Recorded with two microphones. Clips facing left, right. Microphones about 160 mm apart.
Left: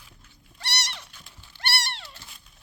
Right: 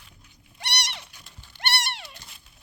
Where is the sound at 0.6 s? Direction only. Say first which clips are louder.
Right 1 dB; 15° right (ahead or behind).